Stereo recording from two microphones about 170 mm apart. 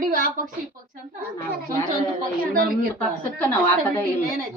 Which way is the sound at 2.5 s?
55° right (ahead or behind).